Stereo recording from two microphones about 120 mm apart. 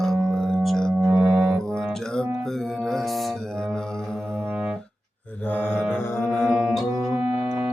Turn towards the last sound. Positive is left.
turn(degrees=-10)  # may be behind; listen again after turning